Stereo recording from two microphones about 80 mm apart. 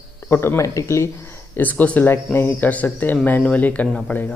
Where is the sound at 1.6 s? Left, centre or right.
Left.